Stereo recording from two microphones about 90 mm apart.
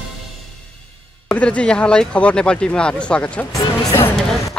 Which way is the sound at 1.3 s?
15° left (ahead or behind).